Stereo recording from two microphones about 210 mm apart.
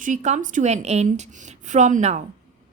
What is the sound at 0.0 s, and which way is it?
A woman's voice, 35° right (ahead or behind).